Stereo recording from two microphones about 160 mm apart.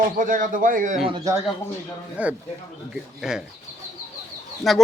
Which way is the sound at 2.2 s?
10° right (ahead or behind).